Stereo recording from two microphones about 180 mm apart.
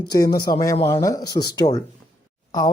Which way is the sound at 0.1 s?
20° left (ahead or behind).